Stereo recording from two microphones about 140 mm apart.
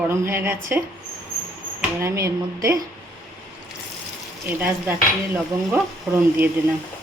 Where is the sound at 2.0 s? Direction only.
20° right (ahead or behind).